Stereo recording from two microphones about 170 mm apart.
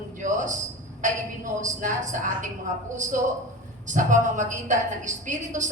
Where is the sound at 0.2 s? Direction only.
45° right (ahead or behind).